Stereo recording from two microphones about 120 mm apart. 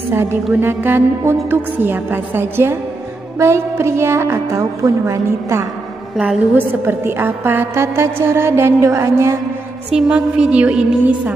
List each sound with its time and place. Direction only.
0.1 s a woman's voice: 20° right (ahead or behind)
9.9 s a woman's voice: 10° right (ahead or behind)